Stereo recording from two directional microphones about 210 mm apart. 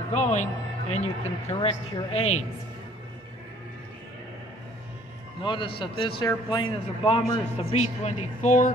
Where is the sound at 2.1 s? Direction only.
90° left.